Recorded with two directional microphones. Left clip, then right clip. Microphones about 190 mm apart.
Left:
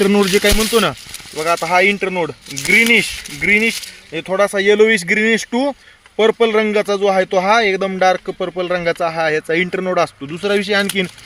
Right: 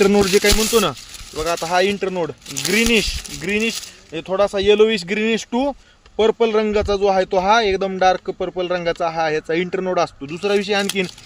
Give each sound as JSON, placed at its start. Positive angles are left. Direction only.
{"t": 0.0, "sound": "speech", "side_deg": 30}